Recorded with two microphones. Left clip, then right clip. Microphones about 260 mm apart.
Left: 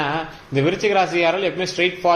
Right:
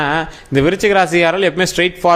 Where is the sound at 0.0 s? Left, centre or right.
Right.